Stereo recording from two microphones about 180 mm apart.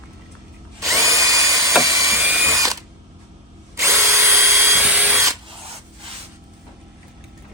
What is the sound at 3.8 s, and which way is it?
Drill, 15° right (ahead or behind).